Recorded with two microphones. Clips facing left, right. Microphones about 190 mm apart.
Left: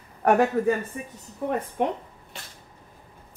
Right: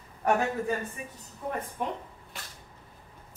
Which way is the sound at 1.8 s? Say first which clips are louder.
Left 8 dB; 70° left (ahead or behind).